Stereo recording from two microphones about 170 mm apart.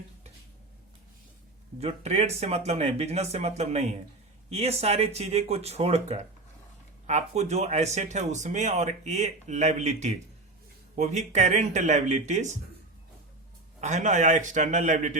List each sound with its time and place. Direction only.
1.8 s speech: 40° right (ahead or behind)
13.8 s speech: 45° right (ahead or behind)